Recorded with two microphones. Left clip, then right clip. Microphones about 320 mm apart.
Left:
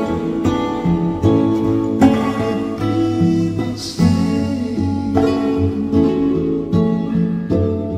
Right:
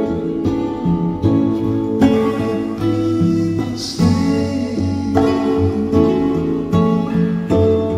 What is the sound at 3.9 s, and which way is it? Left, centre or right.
Music, centre.